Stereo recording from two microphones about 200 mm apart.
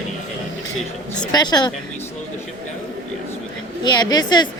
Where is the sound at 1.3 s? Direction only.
20° left (ahead or behind).